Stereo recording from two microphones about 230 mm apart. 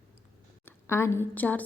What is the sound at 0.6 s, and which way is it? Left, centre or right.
A woman's voice, centre.